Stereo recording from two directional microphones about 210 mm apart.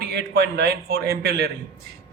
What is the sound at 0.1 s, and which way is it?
A man's voice, 50° right (ahead or behind).